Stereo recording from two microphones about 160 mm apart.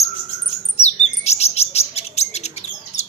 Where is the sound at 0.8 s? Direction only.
40° left (ahead or behind).